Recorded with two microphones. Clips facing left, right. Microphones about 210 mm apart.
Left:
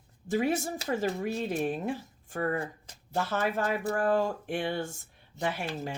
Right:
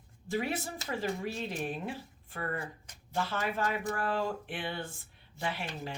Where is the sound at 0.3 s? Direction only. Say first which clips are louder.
Left 6 dB; 45° left (ahead or behind).